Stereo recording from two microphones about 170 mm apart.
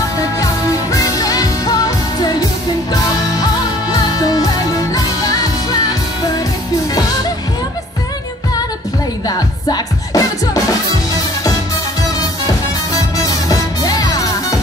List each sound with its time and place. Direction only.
0.9 s music: 20° left (ahead or behind)
3.9 s music: 20° left (ahead or behind)
9.7 s music: 20° left (ahead or behind)
12.9 s music: 20° left (ahead or behind)